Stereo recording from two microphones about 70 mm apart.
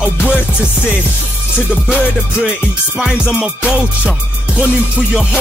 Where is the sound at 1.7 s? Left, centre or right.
Centre.